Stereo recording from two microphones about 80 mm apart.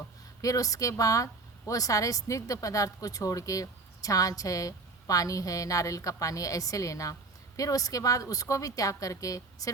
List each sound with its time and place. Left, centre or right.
0.4 s speech: left